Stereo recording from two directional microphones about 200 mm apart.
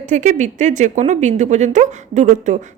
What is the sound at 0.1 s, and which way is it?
Speech, 35° right (ahead or behind).